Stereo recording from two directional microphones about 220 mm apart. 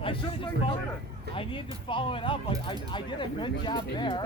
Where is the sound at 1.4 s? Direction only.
25° left (ahead or behind).